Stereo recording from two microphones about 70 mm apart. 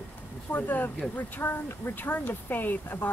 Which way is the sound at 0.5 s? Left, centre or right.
Left.